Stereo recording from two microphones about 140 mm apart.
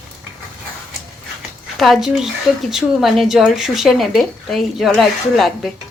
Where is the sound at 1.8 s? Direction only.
Centre (ahead or behind).